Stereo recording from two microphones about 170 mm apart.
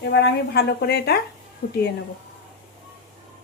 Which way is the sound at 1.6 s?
80° left.